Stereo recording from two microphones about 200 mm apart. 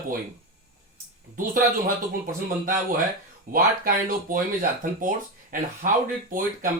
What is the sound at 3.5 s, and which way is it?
Speech, 45° right (ahead or behind).